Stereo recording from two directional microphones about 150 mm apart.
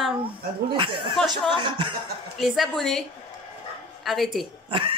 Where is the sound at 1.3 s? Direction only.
30° right (ahead or behind).